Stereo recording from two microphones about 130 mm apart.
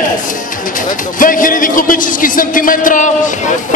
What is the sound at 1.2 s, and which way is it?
A man's voice, 90° left.